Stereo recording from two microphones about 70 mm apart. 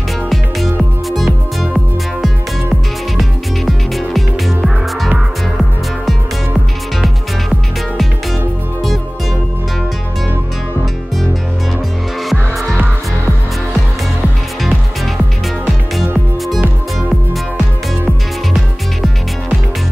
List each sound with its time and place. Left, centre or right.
1.1 s music: centre
5.6 s music: centre